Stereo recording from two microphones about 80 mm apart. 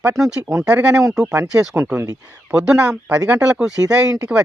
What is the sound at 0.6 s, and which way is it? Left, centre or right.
Speech, centre.